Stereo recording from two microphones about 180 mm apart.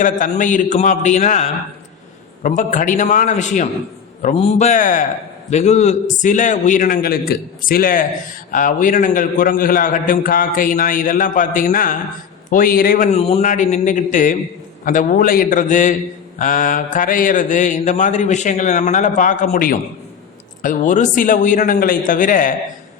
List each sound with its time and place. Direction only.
0.0 s a man's voice: 45° left (ahead or behind)
13.1 s a man's voice: 35° left (ahead or behind)